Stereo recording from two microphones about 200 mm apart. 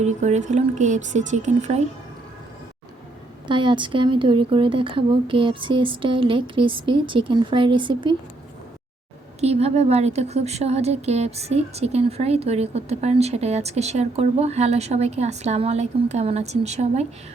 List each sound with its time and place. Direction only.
0.0 s a woman's voice: 35° right (ahead or behind)
3.4 s a woman's voice: 25° right (ahead or behind)
9.4 s a woman's voice: 30° right (ahead or behind)